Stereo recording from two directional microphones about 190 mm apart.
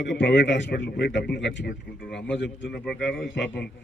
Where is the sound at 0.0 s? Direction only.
65° left (ahead or behind).